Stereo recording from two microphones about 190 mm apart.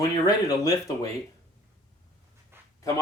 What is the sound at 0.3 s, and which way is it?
Speech, 20° left (ahead or behind).